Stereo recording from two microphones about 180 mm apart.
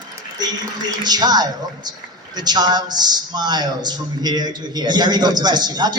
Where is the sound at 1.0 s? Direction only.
20° right (ahead or behind).